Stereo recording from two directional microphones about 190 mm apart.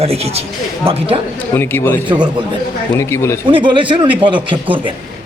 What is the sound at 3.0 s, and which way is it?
Speech, 15° left (ahead or behind).